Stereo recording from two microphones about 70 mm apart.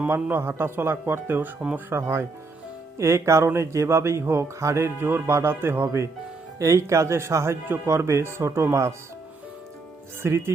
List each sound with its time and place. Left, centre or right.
0.1 s speech: right
5.8 s speech: right
10.2 s speech: right